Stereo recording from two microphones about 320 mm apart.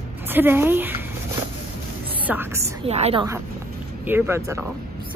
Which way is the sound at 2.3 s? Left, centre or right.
Centre.